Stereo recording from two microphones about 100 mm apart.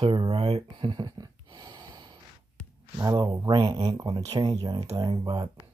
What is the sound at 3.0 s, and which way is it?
Speech, 35° right (ahead or behind).